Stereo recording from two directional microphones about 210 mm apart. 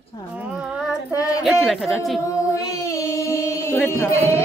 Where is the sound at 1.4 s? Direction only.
Centre (ahead or behind).